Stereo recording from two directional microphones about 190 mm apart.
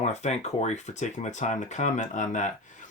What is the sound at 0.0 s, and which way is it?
Speech, 35° left (ahead or behind).